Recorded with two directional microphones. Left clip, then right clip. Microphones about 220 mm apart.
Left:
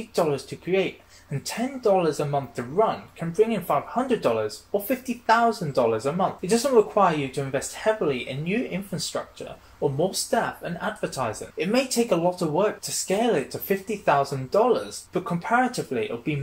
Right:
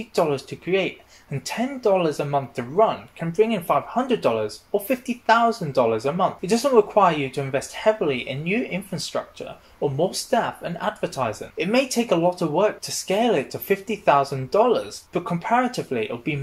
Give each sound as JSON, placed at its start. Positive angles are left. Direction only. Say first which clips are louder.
{"t": 0.1, "sound": "speech", "louder": "right 2 dB", "side_deg": -25}